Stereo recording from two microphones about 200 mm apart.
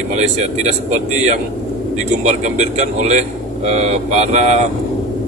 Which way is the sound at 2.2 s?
35° right (ahead or behind).